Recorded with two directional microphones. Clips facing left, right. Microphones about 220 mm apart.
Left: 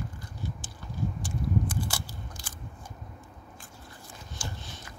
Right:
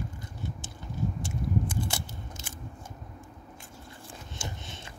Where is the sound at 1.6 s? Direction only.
25° right (ahead or behind).